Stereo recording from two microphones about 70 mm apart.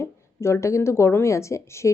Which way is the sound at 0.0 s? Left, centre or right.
Left.